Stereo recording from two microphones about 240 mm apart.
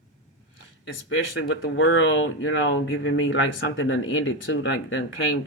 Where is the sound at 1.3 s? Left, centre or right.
Left.